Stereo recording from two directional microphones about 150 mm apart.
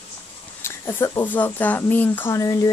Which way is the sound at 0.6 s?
15° left (ahead or behind).